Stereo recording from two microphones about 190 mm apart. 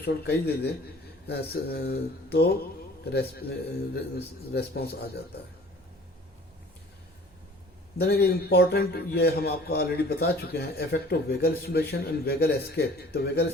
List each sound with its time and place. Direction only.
0.0 s a man's voice: 55° left (ahead or behind)
7.9 s a man's voice: 55° left (ahead or behind)